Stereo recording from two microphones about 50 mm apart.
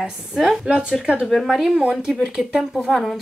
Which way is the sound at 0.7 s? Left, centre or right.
Centre.